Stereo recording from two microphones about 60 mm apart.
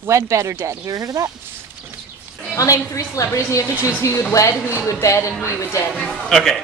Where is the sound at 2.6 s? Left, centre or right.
Left.